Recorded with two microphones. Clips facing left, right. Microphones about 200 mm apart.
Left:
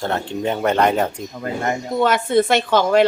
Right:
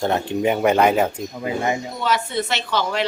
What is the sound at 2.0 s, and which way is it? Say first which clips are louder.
A woman's voice: left 7 dB; 50° left (ahead or behind).